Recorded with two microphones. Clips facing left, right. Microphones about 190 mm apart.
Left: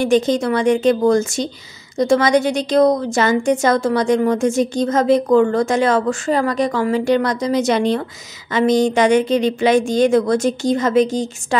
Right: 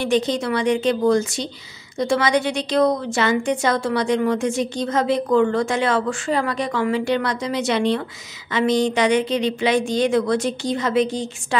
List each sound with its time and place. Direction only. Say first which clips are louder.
0.0 s a woman's voice: left 5 dB; 45° left (ahead or behind)